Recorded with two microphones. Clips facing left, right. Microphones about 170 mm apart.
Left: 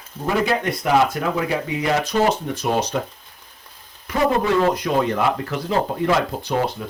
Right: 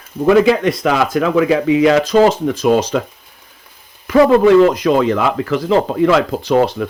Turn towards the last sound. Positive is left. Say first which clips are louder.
# right 9 dB
turn(degrees=-90)